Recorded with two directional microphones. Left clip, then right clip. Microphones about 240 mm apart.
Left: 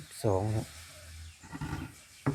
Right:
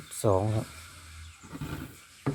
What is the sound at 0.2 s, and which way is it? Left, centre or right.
Speech, centre.